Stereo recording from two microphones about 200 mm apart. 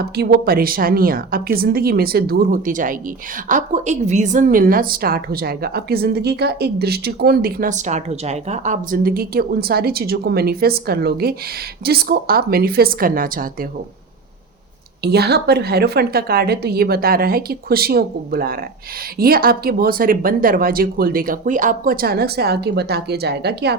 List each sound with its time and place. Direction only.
0.0 s a woman's voice: 50° right (ahead or behind)
15.0 s a woman's voice: 55° right (ahead or behind)